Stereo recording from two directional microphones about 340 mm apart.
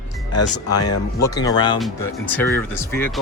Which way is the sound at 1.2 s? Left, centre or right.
Centre.